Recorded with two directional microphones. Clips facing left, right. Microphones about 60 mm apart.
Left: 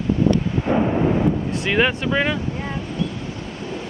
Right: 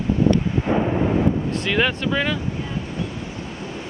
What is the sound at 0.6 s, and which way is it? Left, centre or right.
Thunder, centre.